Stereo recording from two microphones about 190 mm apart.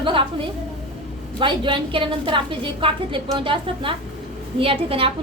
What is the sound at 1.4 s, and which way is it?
A woman's voice, 25° right (ahead or behind).